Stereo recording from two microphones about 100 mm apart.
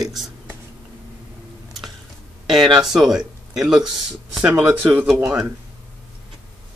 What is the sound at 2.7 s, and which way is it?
Speech, 5° right (ahead or behind).